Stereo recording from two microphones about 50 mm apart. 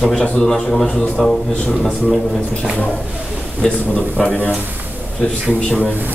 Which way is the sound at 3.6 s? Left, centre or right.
Centre.